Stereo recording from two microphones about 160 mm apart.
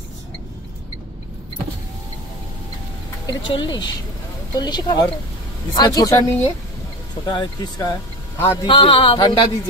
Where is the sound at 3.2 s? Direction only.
30° left (ahead or behind).